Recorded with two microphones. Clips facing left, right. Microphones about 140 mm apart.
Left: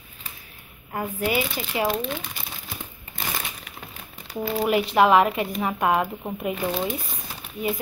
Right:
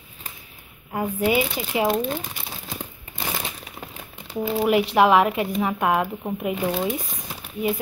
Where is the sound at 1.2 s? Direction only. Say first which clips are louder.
Right 4 dB; 20° right (ahead or behind).